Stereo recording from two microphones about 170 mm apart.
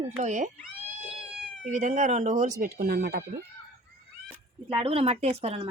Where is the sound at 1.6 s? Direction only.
45° right (ahead or behind); by 3.2 s 65° right (ahead or behind).